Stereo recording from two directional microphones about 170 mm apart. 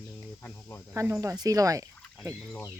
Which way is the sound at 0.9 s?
15° right (ahead or behind).